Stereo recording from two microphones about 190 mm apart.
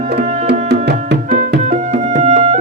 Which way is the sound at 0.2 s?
60° right (ahead or behind).